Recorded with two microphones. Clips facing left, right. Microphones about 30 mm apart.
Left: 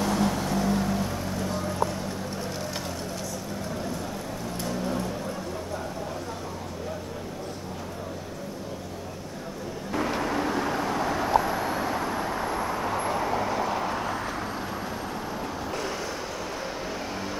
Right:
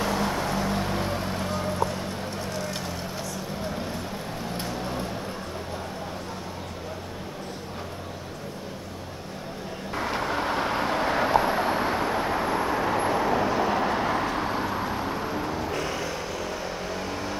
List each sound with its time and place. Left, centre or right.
0.3 s vehicle: right
10.0 s vehicle: right